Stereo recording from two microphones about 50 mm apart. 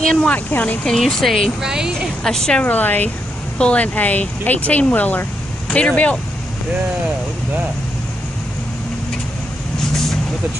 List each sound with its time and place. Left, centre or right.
0.0 s a woman's voice: centre
0.5 s speech: left
0.9 s speech: centre
1.6 s a woman's voice: centre
2.2 s a woman's voice: centre
2.6 s speech: left
3.5 s speech: left
5.7 s speech: left